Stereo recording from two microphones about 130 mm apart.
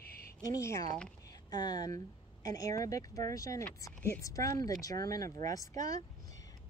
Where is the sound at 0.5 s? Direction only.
25° left (ahead or behind).